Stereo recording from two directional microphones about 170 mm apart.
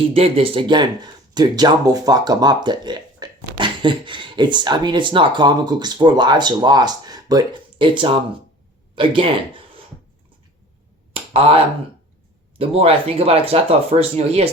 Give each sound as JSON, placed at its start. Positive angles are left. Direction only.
{"t": 0.1, "sound": "speech", "side_deg": -35}
{"t": 11.1, "sound": "a sound", "side_deg": -35}
{"t": 12.5, "sound": "speech", "side_deg": -35}